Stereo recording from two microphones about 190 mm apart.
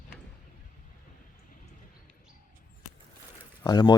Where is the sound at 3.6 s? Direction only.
25° left (ahead or behind).